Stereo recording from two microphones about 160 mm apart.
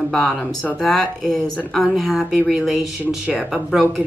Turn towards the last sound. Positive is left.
turn(degrees=0)  # may be behind; listen again after turning